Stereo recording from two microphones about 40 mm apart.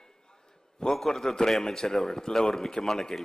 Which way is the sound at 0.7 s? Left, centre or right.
Centre.